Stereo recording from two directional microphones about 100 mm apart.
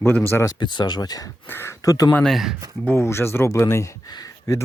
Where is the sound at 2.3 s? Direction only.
Centre (ahead or behind).